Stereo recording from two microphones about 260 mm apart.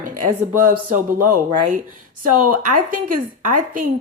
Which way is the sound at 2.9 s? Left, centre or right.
Right.